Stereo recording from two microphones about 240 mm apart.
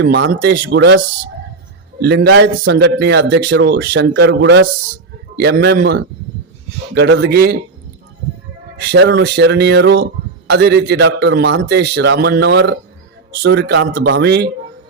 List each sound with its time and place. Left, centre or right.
0.0 s a man's voice: right
8.9 s a man's voice: right